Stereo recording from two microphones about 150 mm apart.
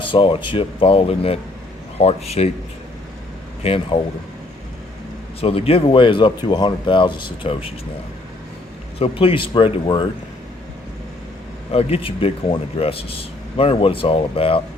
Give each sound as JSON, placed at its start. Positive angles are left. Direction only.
{"t": 0.0, "sound": "speech", "side_deg": 35}
{"t": 3.6, "sound": "speech", "side_deg": 40}
{"t": 5.4, "sound": "speech", "side_deg": 40}
{"t": 9.0, "sound": "speech", "side_deg": 35}
{"t": 11.7, "sound": "speech", "side_deg": 40}